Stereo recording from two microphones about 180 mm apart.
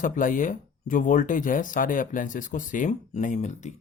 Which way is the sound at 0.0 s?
50° left (ahead or behind).